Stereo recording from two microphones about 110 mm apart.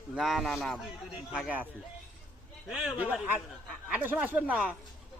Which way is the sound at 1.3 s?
10° right (ahead or behind).